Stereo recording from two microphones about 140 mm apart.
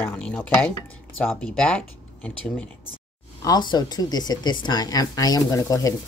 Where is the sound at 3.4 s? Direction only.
30° left (ahead or behind).